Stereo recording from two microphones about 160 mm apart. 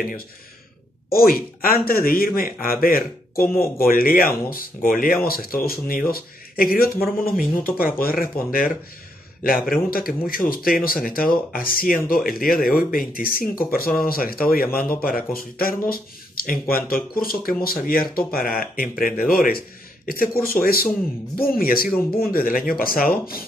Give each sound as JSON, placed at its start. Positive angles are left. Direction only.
{"t": 1.1, "sound": "speech", "side_deg": 65}